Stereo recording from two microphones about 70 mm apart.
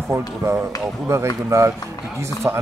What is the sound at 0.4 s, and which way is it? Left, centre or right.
A man's voice, right.